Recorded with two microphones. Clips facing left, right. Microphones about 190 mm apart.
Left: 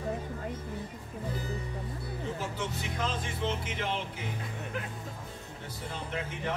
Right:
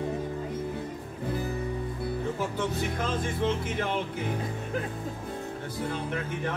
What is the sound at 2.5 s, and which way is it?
Speech, 50° right (ahead or behind).